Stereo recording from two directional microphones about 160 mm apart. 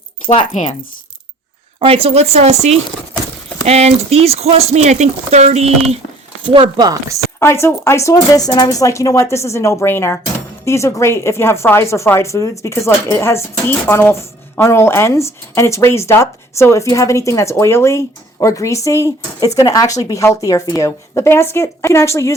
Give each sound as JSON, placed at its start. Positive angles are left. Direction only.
{"t": 0.5, "sound": "speech", "side_deg": 45}
{"t": 1.8, "sound": "speech", "side_deg": -35}
{"t": 6.4, "sound": "speech", "side_deg": -30}
{"t": 7.3, "sound": "a woman's voice", "side_deg": 15}